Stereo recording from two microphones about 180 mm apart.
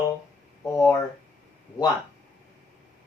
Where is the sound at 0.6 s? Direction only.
15° left (ahead or behind).